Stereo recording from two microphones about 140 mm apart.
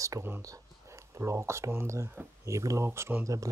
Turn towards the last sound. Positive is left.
turn(degrees=-20)  # may be behind; listen again after turning